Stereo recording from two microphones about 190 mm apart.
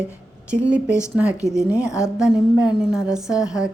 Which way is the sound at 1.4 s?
15° left (ahead or behind).